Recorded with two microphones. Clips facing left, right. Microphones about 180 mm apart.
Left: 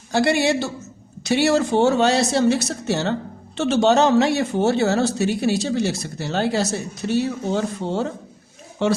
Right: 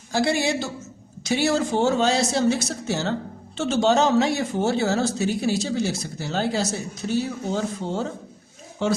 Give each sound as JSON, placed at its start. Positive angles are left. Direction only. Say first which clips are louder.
{"t": 0.1, "sound": "speech", "louder": "left 4 dB", "side_deg": 65}